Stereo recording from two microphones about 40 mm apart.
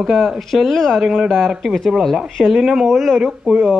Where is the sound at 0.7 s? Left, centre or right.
Centre.